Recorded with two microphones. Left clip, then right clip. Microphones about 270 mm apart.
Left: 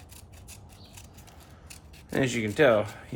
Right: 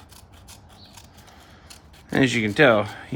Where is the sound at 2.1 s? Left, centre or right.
Right.